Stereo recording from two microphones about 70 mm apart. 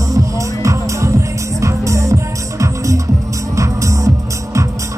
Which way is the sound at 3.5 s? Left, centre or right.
Right.